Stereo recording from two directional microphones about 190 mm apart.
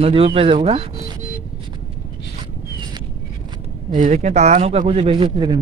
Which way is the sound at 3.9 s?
40° right (ahead or behind).